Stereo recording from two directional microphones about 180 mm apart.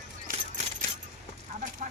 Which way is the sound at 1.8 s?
45° right (ahead or behind).